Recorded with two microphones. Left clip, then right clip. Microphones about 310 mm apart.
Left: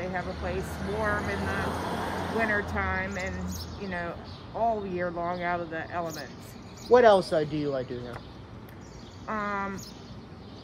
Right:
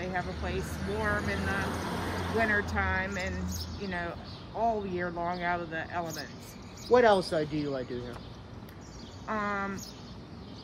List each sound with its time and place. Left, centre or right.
0.0 s speech: centre
1.2 s speech: left
2.5 s speech: centre
6.9 s speech: left
9.2 s speech: centre